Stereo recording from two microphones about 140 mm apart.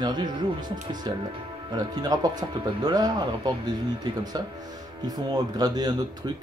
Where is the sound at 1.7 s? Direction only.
30° right (ahead or behind).